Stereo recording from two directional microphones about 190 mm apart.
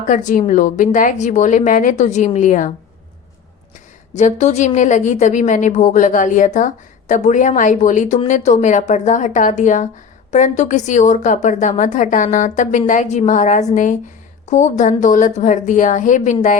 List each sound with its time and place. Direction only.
0.1 s a woman's voice: 40° left (ahead or behind)
4.1 s a woman's voice: 40° left (ahead or behind)